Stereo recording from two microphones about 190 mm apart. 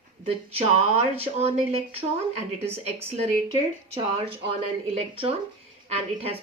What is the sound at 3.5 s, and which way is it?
A woman's voice, 30° right (ahead or behind).